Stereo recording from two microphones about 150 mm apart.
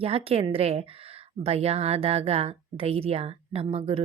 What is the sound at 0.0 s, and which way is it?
A woman's voice, 40° right (ahead or behind).